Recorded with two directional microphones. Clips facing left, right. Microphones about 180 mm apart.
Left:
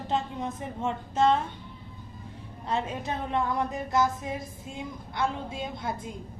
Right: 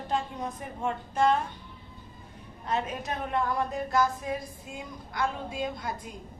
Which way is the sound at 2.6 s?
25° left (ahead or behind).